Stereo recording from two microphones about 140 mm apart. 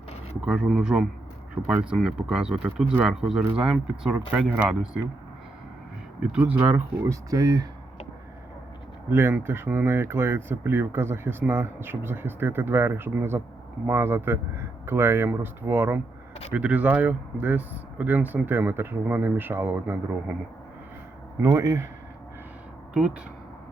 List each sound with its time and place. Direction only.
0.4 s speech: 5° right (ahead or behind)
6.3 s speech: 10° right (ahead or behind)
7.0 s speech: 25° right (ahead or behind)
9.0 s speech: 15° right (ahead or behind)
21.4 s speech: 20° right (ahead or behind)